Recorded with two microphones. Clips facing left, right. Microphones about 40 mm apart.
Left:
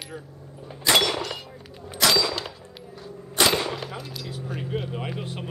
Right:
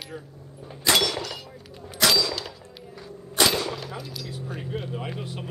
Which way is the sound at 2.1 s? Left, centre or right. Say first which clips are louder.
Left 1 dB; centre.